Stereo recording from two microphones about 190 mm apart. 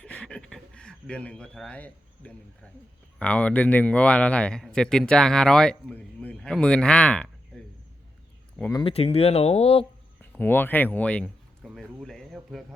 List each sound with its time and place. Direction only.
0.0 s a sound: 5° left (ahead or behind)
3.2 s a man's voice: 5° left (ahead or behind)
8.7 s speech: 30° left (ahead or behind)
10.2 s speech: 10° left (ahead or behind)